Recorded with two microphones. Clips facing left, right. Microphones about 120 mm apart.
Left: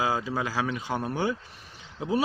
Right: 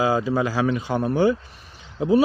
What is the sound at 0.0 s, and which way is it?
Speech, 40° right (ahead or behind).